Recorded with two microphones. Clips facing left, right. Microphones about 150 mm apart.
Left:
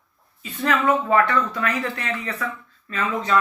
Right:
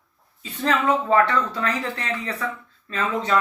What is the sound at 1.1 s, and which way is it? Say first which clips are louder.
Speech: even; 30° right (ahead or behind).